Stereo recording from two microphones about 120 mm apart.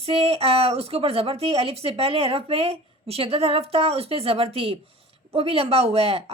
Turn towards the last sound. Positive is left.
turn(degrees=-50)  # may be behind; listen again after turning